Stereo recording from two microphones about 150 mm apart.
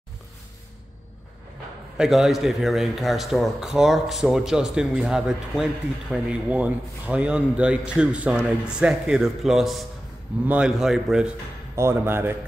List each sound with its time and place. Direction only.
2.0 s speech: 5° right (ahead or behind)
11.7 s speech: 15° right (ahead or behind)